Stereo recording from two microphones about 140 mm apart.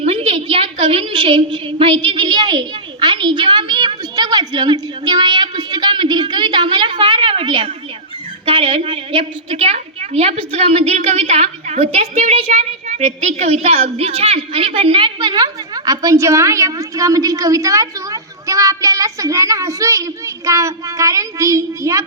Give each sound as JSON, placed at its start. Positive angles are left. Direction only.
{"t": 0.0, "sound": "a woman's voice", "side_deg": -45}